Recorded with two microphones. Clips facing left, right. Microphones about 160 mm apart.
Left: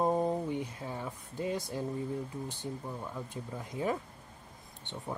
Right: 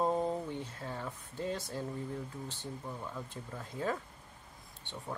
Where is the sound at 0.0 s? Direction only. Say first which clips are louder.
Left 3 dB; 15° left (ahead or behind).